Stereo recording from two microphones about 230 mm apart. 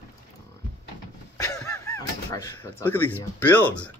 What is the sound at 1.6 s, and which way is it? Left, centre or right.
Honk, centre.